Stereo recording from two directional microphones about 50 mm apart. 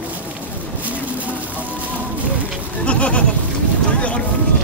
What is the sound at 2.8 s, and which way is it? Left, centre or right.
Goat, left.